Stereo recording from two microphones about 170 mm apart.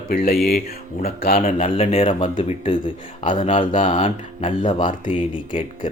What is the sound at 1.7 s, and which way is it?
Speech, 35° left (ahead or behind).